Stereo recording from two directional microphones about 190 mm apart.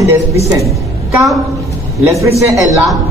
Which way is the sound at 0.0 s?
15° right (ahead or behind).